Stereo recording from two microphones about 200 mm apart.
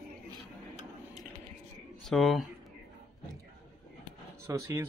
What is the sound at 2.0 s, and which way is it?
Speech, centre (ahead or behind).